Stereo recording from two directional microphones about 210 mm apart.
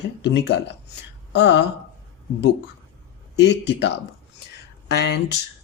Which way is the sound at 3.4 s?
55° left (ahead or behind).